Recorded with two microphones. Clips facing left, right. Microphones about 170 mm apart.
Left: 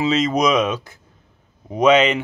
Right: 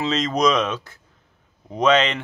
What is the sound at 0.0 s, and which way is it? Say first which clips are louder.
Speech: left 2 dB; 10° left (ahead or behind).